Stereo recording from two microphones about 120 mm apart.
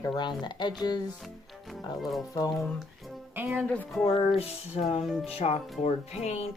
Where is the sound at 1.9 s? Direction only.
Centre (ahead or behind).